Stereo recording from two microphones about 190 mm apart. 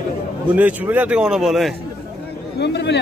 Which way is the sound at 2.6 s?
65° left (ahead or behind).